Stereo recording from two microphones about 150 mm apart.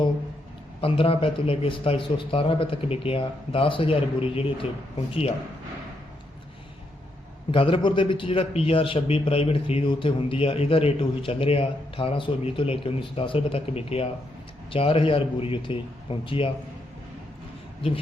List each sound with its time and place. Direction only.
0.8 s a man's voice: 35° left (ahead or behind)
7.5 s a man's voice: 35° left (ahead or behind)